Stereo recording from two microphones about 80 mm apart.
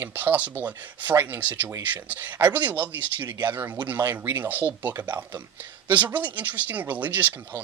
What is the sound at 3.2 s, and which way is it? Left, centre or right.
Speech, right.